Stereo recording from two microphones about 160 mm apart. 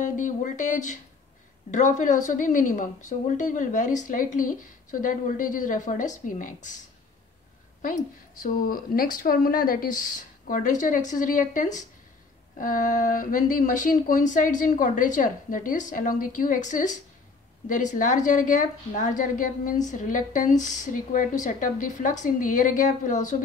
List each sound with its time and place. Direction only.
0.0 s a woman's voice: 50° left (ahead or behind)
7.8 s a woman's voice: 55° left (ahead or behind)